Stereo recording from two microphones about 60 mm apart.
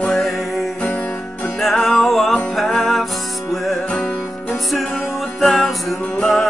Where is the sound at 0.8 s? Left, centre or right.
Left.